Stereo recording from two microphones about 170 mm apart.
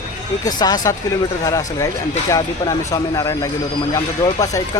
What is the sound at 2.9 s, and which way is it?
Speech, 20° left (ahead or behind).